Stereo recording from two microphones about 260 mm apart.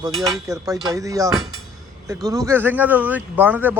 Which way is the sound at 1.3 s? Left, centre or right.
Centre.